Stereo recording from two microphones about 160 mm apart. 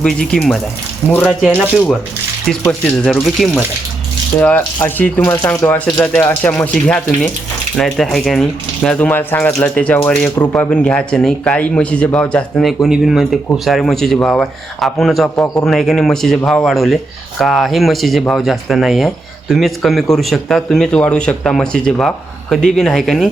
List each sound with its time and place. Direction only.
0.0 s speech: 5° left (ahead or behind)
1.5 s speech: 10° right (ahead or behind)
2.5 s speech: 5° left (ahead or behind)
7.8 s speech: centre (ahead or behind)
10.3 s speech: 25° left (ahead or behind)
10.6 s speech: 10° left (ahead or behind)